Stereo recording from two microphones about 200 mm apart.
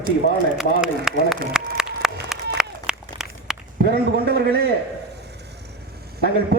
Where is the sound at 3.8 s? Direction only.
55° right (ahead or behind).